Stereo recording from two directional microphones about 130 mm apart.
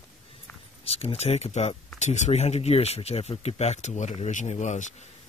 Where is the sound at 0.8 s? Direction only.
50° left (ahead or behind); by 5.0 s 70° left (ahead or behind).